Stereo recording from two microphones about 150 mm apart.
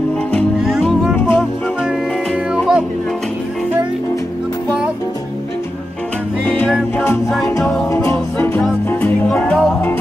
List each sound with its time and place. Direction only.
0.6 s music: 5° right (ahead or behind)
1.1 s music: 15° left (ahead or behind)
2.5 s music: 5° right (ahead or behind)
6.4 s music: 10° left (ahead or behind)